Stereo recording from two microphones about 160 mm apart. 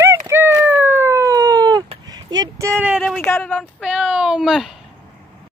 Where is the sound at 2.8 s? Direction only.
5° right (ahead or behind).